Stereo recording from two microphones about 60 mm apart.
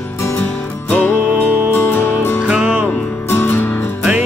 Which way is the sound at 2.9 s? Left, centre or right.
Left.